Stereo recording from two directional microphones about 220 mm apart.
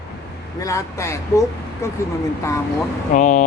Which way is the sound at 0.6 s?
15° left (ahead or behind).